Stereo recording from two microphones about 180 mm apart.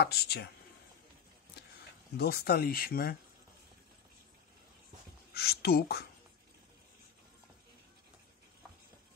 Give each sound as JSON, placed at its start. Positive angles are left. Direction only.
{"t": 0.0, "sound": "speech", "side_deg": 65}
{"t": 2.1, "sound": "speech", "side_deg": 60}
{"t": 5.3, "sound": "speech", "side_deg": 60}